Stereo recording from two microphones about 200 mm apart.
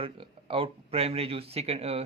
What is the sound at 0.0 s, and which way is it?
Speech, 25° right (ahead or behind).